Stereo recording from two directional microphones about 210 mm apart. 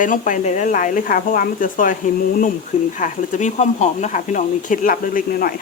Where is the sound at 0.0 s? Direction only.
40° left (ahead or behind).